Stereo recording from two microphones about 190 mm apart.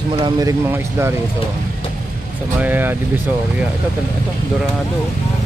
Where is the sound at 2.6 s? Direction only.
10° right (ahead or behind).